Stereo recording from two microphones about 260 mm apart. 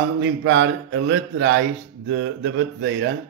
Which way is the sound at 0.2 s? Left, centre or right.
Right.